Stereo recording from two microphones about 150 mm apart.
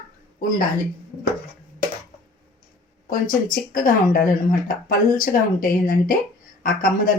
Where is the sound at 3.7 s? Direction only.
70° left (ahead or behind).